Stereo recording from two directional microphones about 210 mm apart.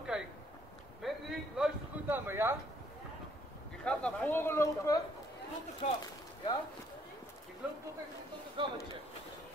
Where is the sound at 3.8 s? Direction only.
5° left (ahead or behind).